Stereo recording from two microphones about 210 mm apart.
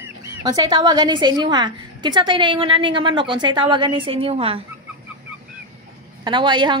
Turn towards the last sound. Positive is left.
turn(degrees=-20)  # may be behind; listen again after turning